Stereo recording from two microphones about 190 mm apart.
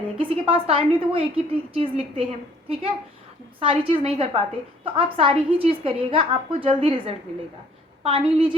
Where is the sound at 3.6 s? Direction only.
30° right (ahead or behind).